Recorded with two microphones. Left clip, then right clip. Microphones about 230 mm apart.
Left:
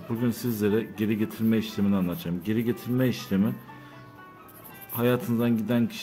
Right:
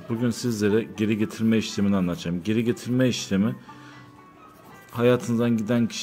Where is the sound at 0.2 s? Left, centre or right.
Centre.